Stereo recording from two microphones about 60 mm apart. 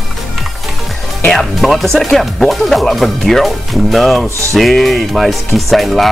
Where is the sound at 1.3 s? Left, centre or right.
Centre.